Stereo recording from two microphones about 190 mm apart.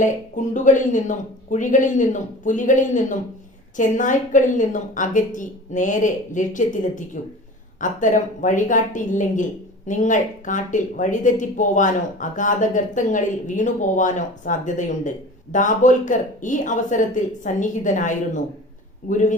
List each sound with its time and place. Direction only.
0.0 s a woman's voice: 40° left (ahead or behind)